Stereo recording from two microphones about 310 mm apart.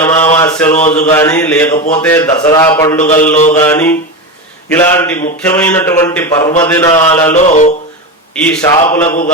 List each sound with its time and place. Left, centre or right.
0.0 s mantra: centre
2.0 s speech: centre
3.0 s a sound: left
3.6 s mantra: centre
4.8 s speech: centre
7.3 s a sound: left
8.4 s mantra: centre